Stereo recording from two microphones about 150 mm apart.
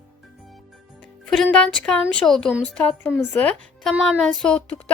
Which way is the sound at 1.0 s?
5° left (ahead or behind).